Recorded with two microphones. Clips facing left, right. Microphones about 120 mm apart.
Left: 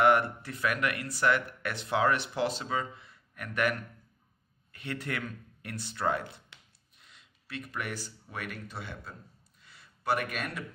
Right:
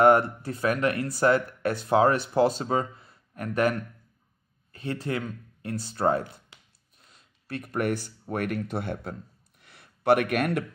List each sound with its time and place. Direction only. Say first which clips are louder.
0.0 s speech: right 5 dB; 40° right (ahead or behind)
4.7 s speech: right 6 dB; 35° right (ahead or behind); by 9.1 s 55° right (ahead or behind)
9.6 s a sound: right 4 dB; 60° right (ahead or behind)